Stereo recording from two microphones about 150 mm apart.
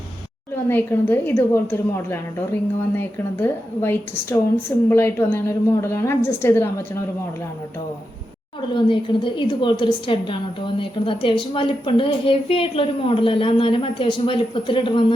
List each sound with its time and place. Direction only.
0.5 s a woman's voice: 15° left (ahead or behind)
8.7 s a woman's voice: 35° left (ahead or behind)